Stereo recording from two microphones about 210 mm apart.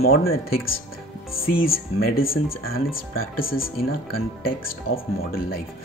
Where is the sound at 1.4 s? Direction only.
45° left (ahead or behind).